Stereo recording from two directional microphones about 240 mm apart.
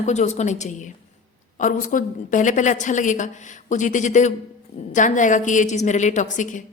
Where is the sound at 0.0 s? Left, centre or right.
Left.